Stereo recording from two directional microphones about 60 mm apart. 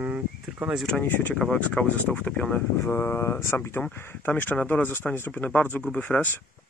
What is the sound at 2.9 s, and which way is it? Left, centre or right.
Speech, left.